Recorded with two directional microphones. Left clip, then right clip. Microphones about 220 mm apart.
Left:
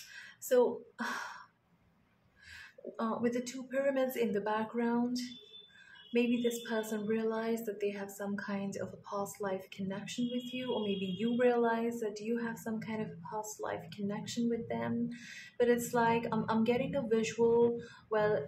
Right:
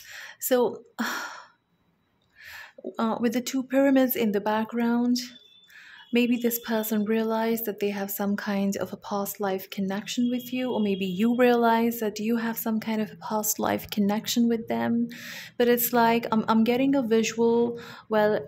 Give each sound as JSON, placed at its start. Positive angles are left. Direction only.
{"t": 0.1, "sound": "gasp", "side_deg": -45}
{"t": 2.5, "sound": "speech", "side_deg": -40}